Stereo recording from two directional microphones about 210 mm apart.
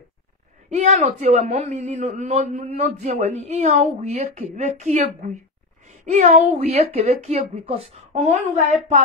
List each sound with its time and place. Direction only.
0.7 s a man's voice: 35° right (ahead or behind)